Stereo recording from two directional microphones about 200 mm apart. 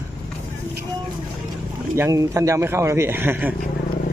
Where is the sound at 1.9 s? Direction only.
15° right (ahead or behind).